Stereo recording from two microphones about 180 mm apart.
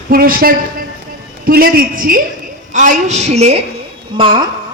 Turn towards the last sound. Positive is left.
turn(degrees=-25)  # may be behind; listen again after turning